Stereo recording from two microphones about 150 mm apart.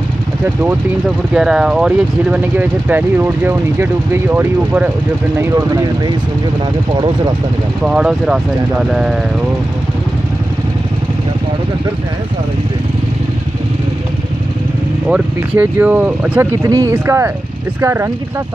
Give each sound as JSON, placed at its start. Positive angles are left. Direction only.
{"t": 1.3, "sound": "speech", "side_deg": -5}
{"t": 7.8, "sound": "speech", "side_deg": -5}
{"t": 15.0, "sound": "speech", "side_deg": -10}